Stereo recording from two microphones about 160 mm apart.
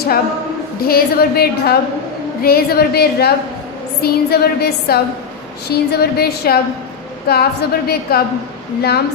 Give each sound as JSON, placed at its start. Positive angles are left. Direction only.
{"t": 0.8, "sound": "a woman's voice", "side_deg": 70}